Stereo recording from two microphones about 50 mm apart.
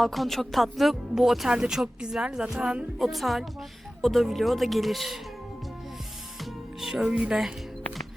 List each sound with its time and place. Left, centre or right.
0.0 s speech: centre
3.0 s speech: centre
6.4 s music: centre
7.1 s speech: right